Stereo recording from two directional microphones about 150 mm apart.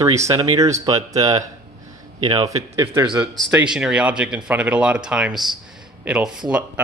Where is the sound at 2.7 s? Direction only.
20° right (ahead or behind).